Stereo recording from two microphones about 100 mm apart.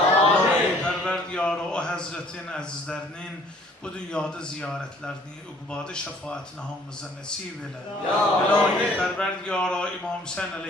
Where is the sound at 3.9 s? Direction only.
10° left (ahead or behind).